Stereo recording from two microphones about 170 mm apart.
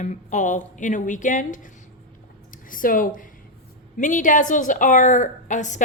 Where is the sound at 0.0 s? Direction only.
45° left (ahead or behind).